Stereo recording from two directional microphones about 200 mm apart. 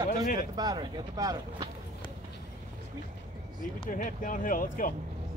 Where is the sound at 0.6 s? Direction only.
20° right (ahead or behind).